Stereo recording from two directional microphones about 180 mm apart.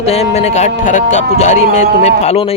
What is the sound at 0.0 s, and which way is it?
Speech, 35° left (ahead or behind).